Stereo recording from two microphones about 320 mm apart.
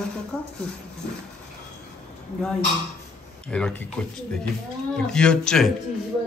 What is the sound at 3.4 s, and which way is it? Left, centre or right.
Speech, centre.